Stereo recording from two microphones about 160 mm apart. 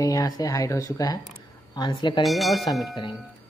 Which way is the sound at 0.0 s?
20° left (ahead or behind).